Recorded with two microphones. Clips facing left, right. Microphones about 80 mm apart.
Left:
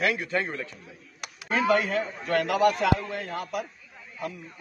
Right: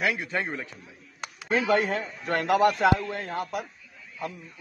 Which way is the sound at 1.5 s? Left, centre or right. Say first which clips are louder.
Even; right.